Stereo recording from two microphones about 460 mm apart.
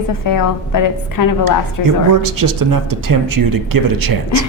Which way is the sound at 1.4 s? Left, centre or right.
Right.